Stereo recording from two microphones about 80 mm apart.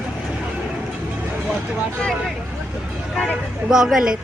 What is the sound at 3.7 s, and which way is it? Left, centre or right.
Speech, centre.